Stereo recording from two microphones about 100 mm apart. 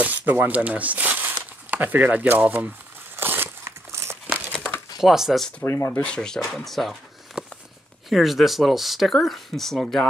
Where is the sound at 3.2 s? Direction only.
20° right (ahead or behind).